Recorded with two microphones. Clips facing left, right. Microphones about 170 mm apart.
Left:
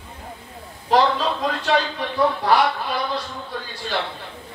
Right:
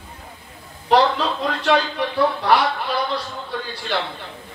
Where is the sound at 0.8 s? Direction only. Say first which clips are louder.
Right 1 dB; 70° right (ahead or behind).